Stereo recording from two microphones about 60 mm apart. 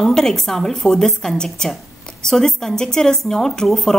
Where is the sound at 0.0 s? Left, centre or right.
Centre.